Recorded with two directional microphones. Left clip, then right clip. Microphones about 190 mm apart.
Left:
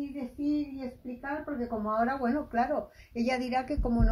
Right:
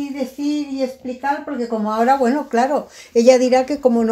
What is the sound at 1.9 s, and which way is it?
A woman's voice, 35° right (ahead or behind).